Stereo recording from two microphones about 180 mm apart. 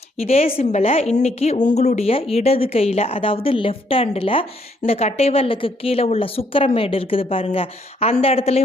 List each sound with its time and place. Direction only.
0.2 s a woman's voice: 35° left (ahead or behind)